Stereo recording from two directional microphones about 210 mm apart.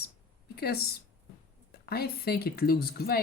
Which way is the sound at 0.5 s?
50° left (ahead or behind).